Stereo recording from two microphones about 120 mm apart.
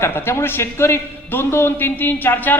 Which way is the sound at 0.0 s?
20° left (ahead or behind).